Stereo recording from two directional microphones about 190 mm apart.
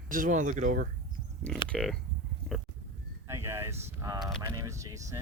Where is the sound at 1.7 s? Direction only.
Centre (ahead or behind).